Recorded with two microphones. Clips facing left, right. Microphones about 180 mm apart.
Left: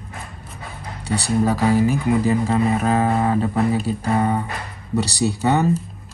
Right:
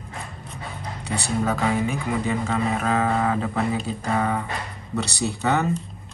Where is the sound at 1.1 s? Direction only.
35° left (ahead or behind).